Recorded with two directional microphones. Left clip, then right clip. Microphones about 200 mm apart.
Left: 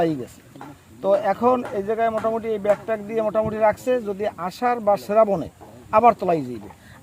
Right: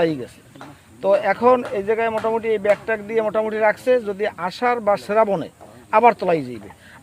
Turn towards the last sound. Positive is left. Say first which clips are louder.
# right 1 dB
turn(degrees=-15)  # may be behind; listen again after turning